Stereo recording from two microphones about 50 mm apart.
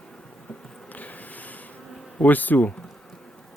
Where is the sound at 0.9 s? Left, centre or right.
Left.